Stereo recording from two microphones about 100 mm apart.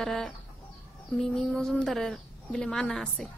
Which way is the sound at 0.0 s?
5° left (ahead or behind).